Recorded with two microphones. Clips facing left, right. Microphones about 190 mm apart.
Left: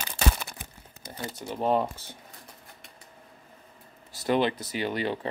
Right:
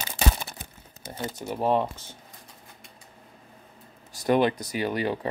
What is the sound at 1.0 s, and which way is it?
Speech, 25° right (ahead or behind).